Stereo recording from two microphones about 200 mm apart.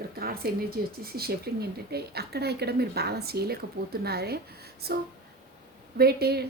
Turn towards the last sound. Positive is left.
turn(degrees=-55)  # may be behind; listen again after turning